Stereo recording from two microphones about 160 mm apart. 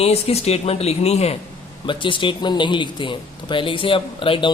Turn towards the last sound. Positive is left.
turn(degrees=35)  # may be behind; listen again after turning